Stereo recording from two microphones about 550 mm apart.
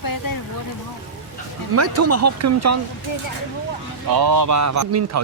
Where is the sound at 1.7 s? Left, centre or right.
Right.